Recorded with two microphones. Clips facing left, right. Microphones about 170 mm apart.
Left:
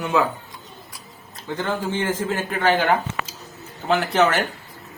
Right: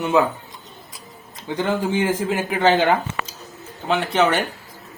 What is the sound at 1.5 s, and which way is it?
A man's voice, 15° right (ahead or behind).